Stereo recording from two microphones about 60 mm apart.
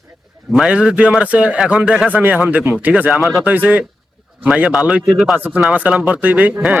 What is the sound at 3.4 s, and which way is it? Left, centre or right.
Speech, right.